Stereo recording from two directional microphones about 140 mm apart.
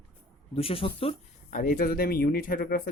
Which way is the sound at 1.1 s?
75° left (ahead or behind).